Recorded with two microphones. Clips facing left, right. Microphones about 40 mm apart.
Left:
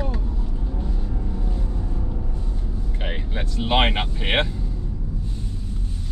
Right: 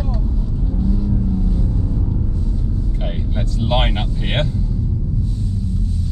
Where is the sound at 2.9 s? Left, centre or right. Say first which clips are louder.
Right 4 dB; left.